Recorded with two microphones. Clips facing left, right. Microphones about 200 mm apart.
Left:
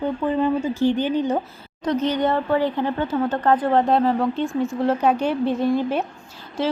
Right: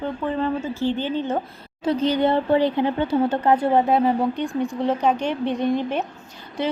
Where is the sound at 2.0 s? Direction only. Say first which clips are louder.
Right 2 dB; 30° right (ahead or behind).